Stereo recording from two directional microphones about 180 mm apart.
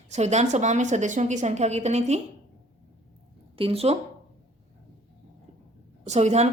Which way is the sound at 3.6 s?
30° right (ahead or behind).